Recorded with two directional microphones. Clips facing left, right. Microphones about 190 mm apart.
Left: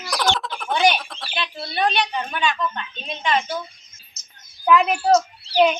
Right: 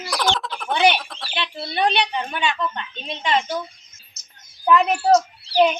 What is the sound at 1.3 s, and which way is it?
A woman's voice, 25° right (ahead or behind).